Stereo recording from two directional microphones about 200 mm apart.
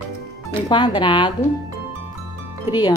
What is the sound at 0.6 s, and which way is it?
Speech, 20° left (ahead or behind).